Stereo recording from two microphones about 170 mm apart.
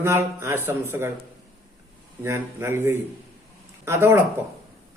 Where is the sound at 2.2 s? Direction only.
15° right (ahead or behind).